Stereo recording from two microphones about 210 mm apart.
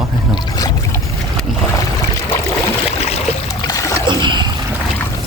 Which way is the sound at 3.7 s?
15° left (ahead or behind).